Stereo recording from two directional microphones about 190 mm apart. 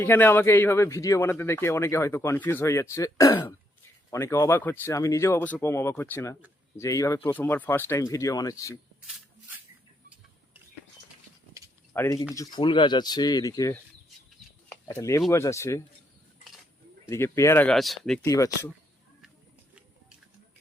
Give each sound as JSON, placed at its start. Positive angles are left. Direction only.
{"t": 0.0, "sound": "speech", "side_deg": 10}
{"t": 11.9, "sound": "speech", "side_deg": 15}
{"t": 14.7, "sound": "a sound", "side_deg": 15}
{"t": 15.3, "sound": "speech", "side_deg": 15}
{"t": 17.1, "sound": "speech", "side_deg": 15}
{"t": 18.3, "sound": "speech", "side_deg": 15}